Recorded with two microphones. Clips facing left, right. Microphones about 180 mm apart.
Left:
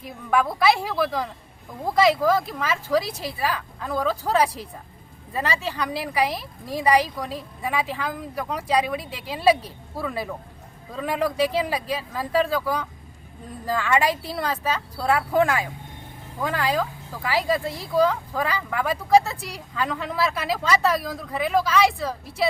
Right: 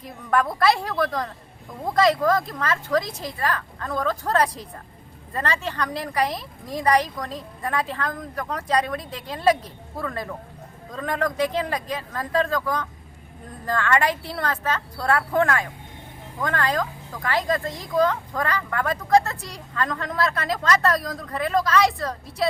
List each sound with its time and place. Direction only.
0.0 s a woman's voice: 5° left (ahead or behind)